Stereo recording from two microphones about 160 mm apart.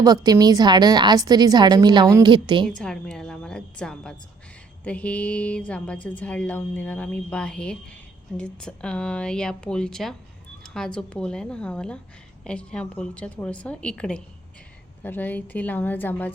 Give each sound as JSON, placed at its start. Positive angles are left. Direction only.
{"t": 0.0, "sound": "a woman's voice", "side_deg": -25}
{"t": 2.6, "sound": "speech", "side_deg": 5}